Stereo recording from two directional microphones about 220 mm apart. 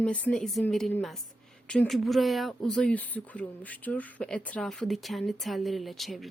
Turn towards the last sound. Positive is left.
turn(degrees=0)  # may be behind; listen again after turning